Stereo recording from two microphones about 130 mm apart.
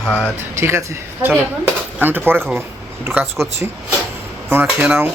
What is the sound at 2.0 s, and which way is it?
Speech, 15° right (ahead or behind).